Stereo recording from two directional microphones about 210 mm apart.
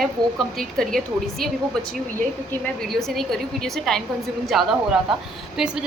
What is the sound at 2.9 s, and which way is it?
A woman's voice, centre (ahead or behind).